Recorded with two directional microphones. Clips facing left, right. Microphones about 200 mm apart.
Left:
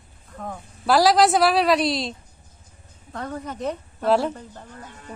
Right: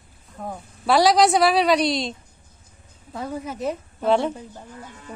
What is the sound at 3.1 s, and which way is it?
Speech, 5° right (ahead or behind).